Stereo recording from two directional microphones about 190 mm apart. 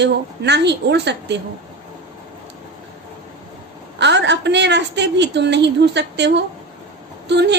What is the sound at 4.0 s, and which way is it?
A woman's voice, 65° right (ahead or behind).